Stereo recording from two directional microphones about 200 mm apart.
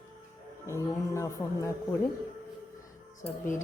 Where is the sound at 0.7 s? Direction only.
15° left (ahead or behind).